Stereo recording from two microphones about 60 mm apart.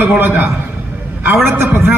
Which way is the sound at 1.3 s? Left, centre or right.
Right.